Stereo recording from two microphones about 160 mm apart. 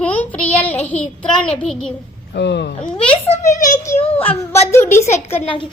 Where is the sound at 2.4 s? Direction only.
90° left.